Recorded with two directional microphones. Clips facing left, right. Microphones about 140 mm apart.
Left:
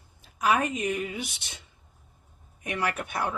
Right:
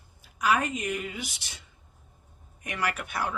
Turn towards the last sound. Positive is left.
turn(degrees=25)  # may be behind; listen again after turning